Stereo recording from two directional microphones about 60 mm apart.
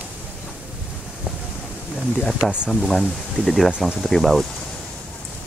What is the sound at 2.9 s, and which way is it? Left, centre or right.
Speech, centre.